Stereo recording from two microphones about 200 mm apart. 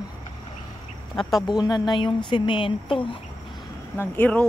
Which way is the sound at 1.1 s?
Centre (ahead or behind).